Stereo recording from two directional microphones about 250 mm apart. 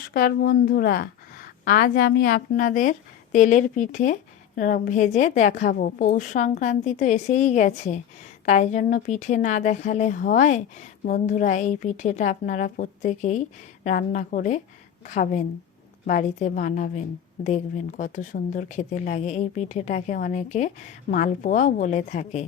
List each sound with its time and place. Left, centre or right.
0.1 s a woman's voice: left